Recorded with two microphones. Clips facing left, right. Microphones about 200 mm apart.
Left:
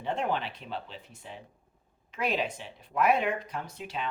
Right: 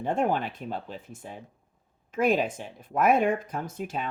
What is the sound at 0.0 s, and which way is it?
Speech, 50° right (ahead or behind).